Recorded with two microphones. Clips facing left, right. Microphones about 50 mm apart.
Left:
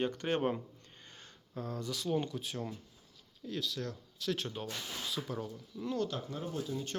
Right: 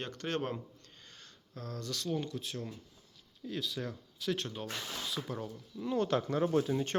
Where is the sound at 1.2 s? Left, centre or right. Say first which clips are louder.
Left 4 dB; centre.